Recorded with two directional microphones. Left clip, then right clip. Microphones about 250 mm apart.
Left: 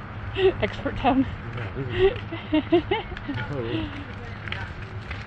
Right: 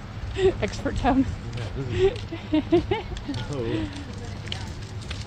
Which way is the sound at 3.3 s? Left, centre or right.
Right.